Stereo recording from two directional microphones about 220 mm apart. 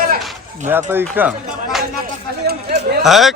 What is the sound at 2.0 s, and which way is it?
Speech, 40° right (ahead or behind).